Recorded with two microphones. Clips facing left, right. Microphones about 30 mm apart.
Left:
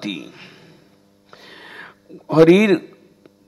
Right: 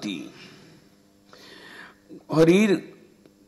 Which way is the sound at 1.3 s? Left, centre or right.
Left.